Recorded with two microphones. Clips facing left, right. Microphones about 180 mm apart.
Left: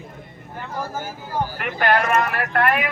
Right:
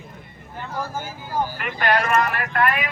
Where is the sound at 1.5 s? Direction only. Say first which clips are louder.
Left 4 dB; 55° left (ahead or behind).